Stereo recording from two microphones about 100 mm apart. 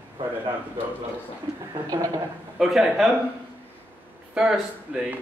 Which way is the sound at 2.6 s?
5° right (ahead or behind).